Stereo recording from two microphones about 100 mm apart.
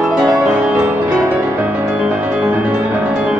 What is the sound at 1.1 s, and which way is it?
Music, 30° right (ahead or behind).